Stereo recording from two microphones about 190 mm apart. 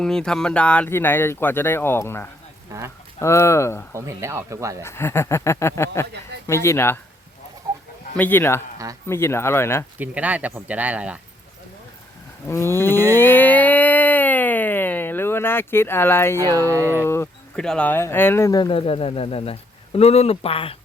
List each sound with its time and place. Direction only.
0.0 s speech: 5° left (ahead or behind)
3.9 s speech: 15° right (ahead or behind)
4.8 s speech: 15° left (ahead or behind)
8.1 s speech: 10° left (ahead or behind)
10.0 s speech: 10° right (ahead or behind)
12.5 s livestock: 15° left (ahead or behind)
16.4 s speech: 20° right (ahead or behind)
17.1 s speech: 10° left (ahead or behind); by 20.7 s 30° left (ahead or behind)